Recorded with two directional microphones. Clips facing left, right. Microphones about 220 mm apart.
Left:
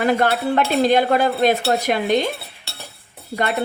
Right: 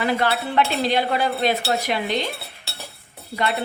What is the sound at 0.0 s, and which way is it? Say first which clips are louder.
Speech: left 4 dB; 50° left (ahead or behind).